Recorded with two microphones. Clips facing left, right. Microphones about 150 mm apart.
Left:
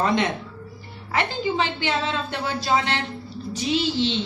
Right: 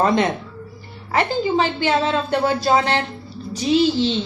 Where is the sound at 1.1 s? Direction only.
40° right (ahead or behind).